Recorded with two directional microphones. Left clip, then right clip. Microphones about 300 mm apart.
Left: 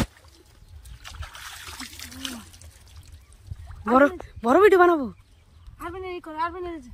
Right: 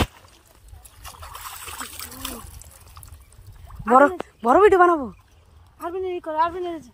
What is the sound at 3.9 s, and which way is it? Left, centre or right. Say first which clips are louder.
Speech: right 4 dB; centre.